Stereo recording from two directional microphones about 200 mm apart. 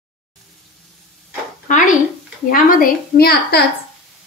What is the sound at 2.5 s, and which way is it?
A woman's voice, 45° left (ahead or behind).